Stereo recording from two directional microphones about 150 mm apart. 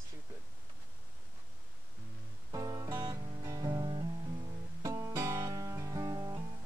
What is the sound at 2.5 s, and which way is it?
Guitar, 25° right (ahead or behind).